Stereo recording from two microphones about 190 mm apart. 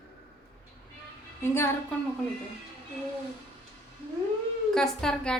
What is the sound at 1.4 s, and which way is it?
Speech, 10° left (ahead or behind).